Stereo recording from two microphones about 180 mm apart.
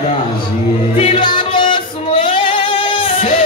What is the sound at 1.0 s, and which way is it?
Music, 30° left (ahead or behind).